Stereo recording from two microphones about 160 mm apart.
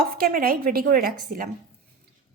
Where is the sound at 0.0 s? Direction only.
65° right (ahead or behind).